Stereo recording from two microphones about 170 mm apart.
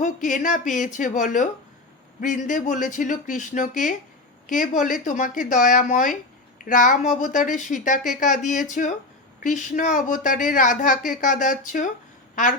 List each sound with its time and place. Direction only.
0.0 s a woman's voice: 50° left (ahead or behind)